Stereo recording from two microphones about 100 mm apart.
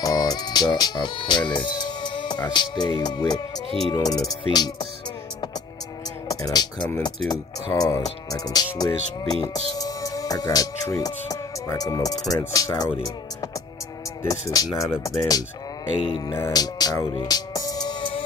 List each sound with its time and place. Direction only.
0.0 s music: 40° left (ahead or behind)
3.9 s speech: 40° left (ahead or behind)
6.2 s speech: 40° left (ahead or behind)
16.5 s speech: 40° left (ahead or behind)
17.0 s speech: 55° left (ahead or behind)
17.3 s music: 40° left (ahead or behind)